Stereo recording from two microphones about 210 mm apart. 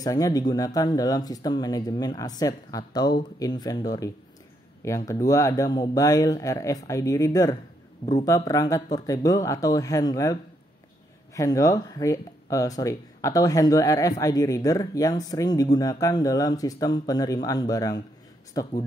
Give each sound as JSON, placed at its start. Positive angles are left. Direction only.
{"t": 0.0, "sound": "speech", "side_deg": 15}